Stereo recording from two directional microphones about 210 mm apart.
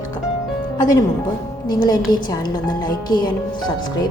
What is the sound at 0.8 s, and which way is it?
A woman's voice, 20° left (ahead or behind).